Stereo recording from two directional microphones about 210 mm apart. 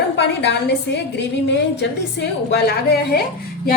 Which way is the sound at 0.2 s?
55° left (ahead or behind).